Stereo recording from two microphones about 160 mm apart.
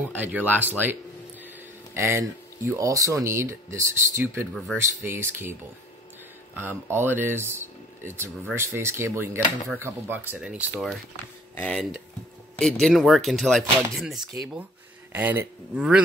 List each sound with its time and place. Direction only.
0.0 s speech: 10° right (ahead or behind)
2.0 s speech: 15° right (ahead or behind)
11.5 s speech: 10° left (ahead or behind); by 16.0 s 5° right (ahead or behind)